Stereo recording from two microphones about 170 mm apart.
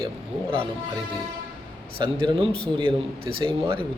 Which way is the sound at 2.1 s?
30° right (ahead or behind).